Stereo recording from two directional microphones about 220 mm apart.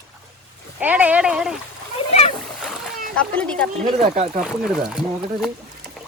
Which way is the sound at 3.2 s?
5° left (ahead or behind).